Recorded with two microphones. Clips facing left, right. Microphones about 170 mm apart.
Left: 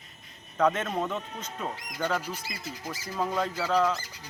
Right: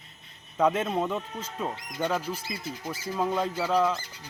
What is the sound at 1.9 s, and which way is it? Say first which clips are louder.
Speech: right 2 dB; 25° right (ahead or behind).